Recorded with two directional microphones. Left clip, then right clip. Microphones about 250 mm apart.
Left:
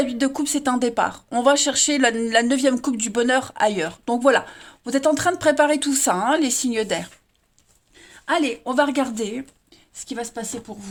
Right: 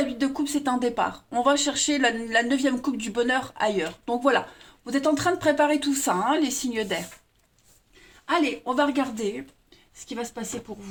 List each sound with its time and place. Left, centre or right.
0.0 s speech: left
8.3 s speech: left